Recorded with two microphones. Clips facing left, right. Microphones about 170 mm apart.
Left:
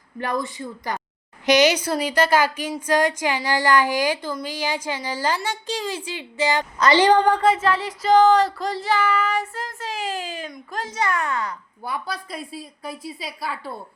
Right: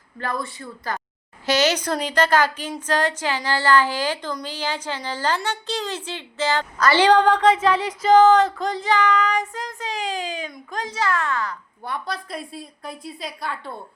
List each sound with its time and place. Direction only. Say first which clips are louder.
0.2 s a woman's voice: left 3 dB; 20° left (ahead or behind)
11.1 s a woman's voice: right 1 dB; 20° left (ahead or behind)
11.8 s a woman's voice: even; 5° left (ahead or behind)